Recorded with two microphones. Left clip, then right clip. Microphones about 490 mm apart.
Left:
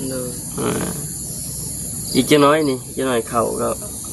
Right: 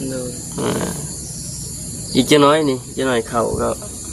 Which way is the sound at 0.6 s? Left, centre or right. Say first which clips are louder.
Right 1 dB; left.